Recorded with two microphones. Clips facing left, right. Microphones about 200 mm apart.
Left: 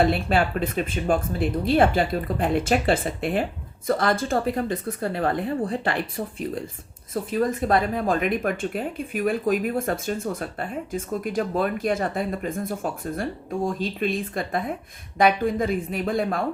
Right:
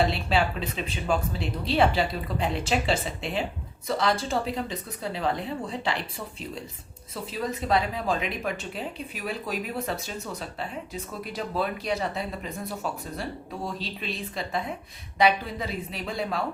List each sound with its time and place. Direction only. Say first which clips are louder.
0.0 s speech: left 4 dB; 50° left (ahead or behind)